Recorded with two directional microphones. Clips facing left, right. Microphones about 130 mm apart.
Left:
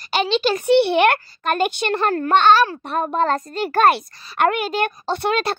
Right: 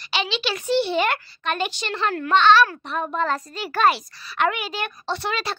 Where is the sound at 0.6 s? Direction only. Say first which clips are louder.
Left 6 dB; 60° left (ahead or behind).